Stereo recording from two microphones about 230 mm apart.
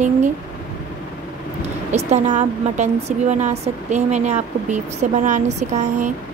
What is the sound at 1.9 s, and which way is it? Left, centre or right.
A woman's voice, right.